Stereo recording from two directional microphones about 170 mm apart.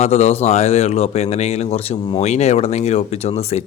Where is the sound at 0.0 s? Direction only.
40° left (ahead or behind).